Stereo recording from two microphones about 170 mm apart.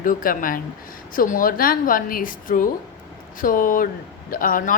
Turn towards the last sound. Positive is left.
turn(degrees=55)  # may be behind; listen again after turning